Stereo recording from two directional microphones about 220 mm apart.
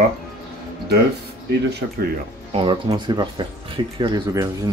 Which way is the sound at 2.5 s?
25° right (ahead or behind).